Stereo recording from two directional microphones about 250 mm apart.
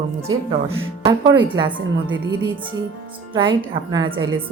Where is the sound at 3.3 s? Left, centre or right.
Centre.